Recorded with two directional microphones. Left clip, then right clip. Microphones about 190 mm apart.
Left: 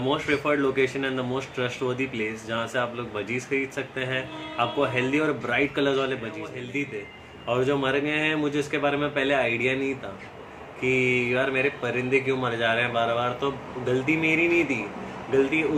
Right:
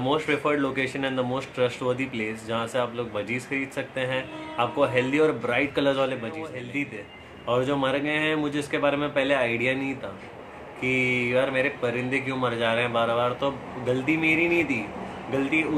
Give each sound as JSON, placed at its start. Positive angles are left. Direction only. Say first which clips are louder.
{"t": 0.1, "sound": "speech", "louder": "even", "side_deg": -15}
{"t": 10.8, "sound": "speech", "louder": "left 1 dB", "side_deg": -15}